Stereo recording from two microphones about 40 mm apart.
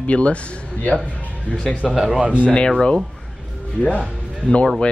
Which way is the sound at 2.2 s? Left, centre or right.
Right.